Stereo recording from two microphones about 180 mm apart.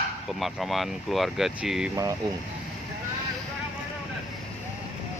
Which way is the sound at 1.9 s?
20° right (ahead or behind).